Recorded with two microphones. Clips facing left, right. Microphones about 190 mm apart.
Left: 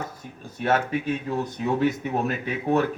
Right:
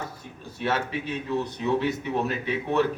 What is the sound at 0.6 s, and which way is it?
A man's voice, 45° left (ahead or behind).